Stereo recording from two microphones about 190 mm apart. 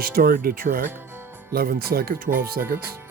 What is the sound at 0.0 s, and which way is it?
Speech, 50° right (ahead or behind).